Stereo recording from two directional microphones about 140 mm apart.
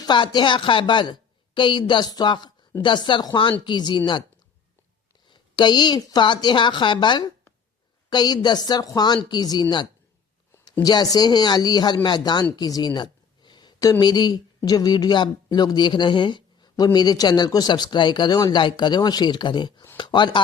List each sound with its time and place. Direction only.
0.0 s speech: 35° left (ahead or behind)
5.3 s speech: 30° left (ahead or behind)
10.8 s speech: 30° left (ahead or behind)
12.5 s a sound: 25° left (ahead or behind)
14.0 s speech: 30° left (ahead or behind)